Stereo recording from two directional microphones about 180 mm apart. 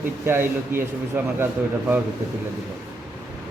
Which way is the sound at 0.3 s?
10° right (ahead or behind).